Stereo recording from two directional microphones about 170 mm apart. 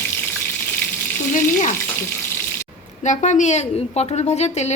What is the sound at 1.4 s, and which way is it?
Frying, 50° left (ahead or behind).